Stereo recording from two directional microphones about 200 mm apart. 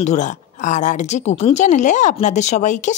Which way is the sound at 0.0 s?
35° left (ahead or behind).